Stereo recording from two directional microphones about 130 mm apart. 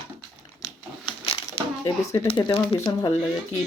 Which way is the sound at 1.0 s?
45° left (ahead or behind).